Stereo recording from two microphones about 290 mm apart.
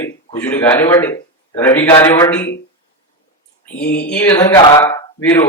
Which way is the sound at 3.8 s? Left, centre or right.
Left.